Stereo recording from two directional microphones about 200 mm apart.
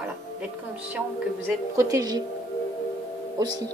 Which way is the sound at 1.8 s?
15° right (ahead or behind).